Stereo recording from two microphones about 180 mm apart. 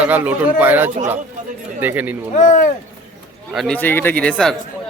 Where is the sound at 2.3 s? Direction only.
45° left (ahead or behind).